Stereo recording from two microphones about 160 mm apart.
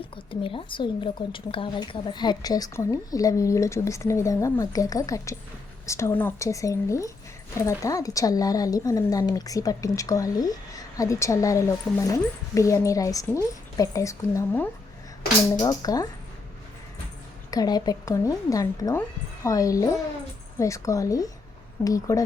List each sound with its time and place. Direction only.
0.3 s speech: 35° left (ahead or behind)
17.5 s speech: 25° left (ahead or behind)